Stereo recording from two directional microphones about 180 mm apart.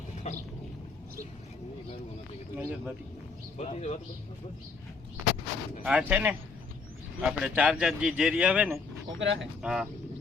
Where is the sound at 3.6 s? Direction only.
35° left (ahead or behind).